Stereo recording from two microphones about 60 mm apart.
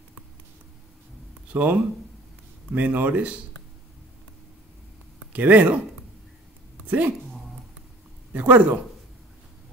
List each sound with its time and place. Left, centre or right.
1.5 s speech: right
5.3 s speech: right
6.9 s speech: right
8.3 s speech: right